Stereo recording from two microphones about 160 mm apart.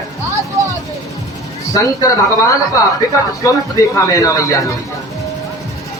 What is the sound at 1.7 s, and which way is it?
Speech, 20° left (ahead or behind).